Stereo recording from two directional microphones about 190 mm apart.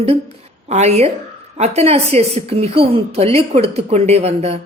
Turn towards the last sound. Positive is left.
turn(degrees=-35)  # may be behind; listen again after turning